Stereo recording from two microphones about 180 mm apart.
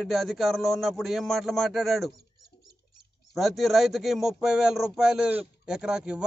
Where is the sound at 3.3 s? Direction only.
Centre (ahead or behind).